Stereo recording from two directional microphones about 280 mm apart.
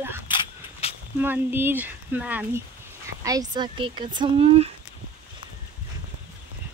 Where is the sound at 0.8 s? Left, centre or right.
Left.